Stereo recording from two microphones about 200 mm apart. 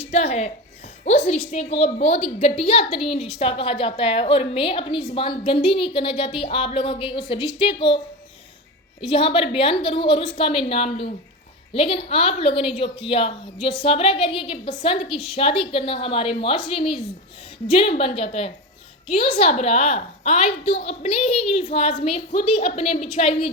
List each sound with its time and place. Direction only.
0.1 s a woman's voice: 35° left (ahead or behind)